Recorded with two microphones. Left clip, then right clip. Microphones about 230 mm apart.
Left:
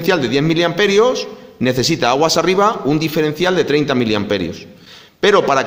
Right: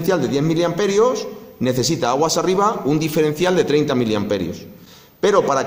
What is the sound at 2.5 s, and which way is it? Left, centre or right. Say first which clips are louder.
Speech: left 3 dB; left.